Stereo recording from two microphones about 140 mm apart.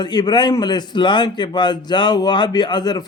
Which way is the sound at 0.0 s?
30° left (ahead or behind).